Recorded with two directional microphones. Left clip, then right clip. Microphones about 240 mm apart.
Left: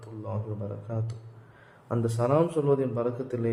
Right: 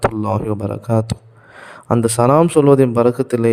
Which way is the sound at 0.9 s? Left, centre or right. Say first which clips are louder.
Right 19 dB; right.